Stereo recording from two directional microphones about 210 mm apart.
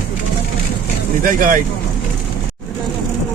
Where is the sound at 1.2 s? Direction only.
40° right (ahead or behind).